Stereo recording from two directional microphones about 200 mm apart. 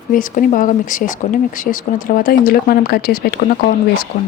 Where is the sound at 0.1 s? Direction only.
40° left (ahead or behind).